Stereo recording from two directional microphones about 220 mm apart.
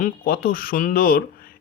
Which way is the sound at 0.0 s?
40° left (ahead or behind).